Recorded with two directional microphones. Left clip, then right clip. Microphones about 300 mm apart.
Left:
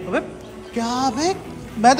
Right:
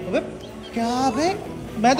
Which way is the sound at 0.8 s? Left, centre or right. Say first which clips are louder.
Even; centre.